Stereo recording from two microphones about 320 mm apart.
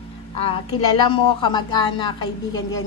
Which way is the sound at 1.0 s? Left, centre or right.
Centre.